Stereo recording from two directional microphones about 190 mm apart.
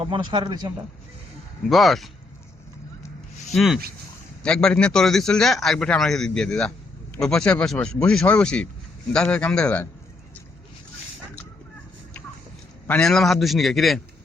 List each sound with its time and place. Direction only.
0.0 s a man's voice: 25° right (ahead or behind)
1.7 s a man's voice: centre (ahead or behind)
3.5 s a man's voice: centre (ahead or behind)
12.9 s a man's voice: 5° left (ahead or behind)